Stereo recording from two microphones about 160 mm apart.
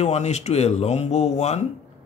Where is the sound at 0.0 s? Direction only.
45° left (ahead or behind).